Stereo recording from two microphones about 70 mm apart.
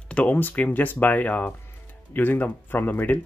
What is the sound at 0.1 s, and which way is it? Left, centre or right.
Speech, centre.